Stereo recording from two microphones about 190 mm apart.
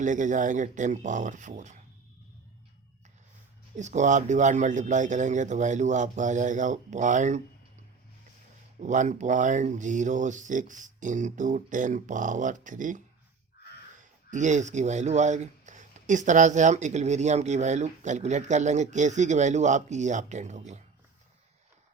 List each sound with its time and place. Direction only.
0.0 s speech: 40° right (ahead or behind)
3.8 s speech: 40° right (ahead or behind)
8.8 s speech: 40° right (ahead or behind)